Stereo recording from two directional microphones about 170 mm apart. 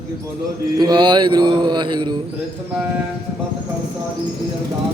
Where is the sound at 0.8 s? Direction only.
25° right (ahead or behind).